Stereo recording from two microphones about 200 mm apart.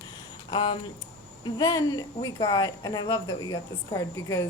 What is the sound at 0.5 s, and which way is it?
A woman's voice, 25° left (ahead or behind).